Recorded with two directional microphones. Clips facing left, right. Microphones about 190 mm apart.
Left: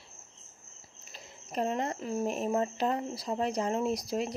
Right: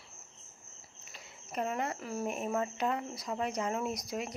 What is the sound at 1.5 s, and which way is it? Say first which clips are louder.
Speech: left 3 dB; 30° left (ahead or behind).